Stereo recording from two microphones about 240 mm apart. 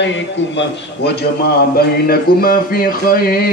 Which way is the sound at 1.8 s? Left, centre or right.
Left.